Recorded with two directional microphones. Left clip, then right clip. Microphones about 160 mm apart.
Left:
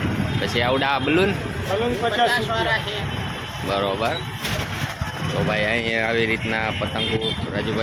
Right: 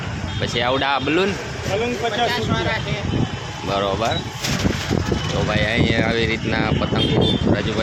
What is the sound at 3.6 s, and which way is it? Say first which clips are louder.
Speech: right 2 dB; 5° right (ahead or behind).